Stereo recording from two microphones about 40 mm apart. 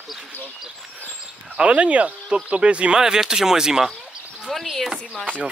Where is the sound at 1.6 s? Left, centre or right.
Right.